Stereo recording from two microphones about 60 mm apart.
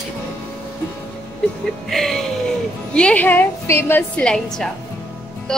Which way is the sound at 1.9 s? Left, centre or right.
Centre.